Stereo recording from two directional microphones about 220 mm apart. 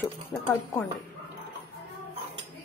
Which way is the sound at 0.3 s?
10° left (ahead or behind).